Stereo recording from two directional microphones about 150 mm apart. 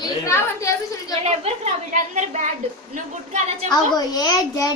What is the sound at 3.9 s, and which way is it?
Speech, 25° left (ahead or behind).